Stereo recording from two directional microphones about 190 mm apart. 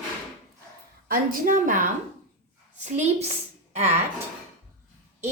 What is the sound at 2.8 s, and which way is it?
Speech, 35° right (ahead or behind).